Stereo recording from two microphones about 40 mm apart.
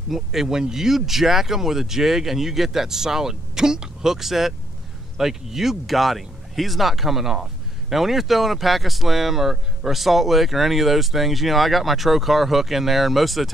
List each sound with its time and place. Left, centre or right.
0.1 s speech: centre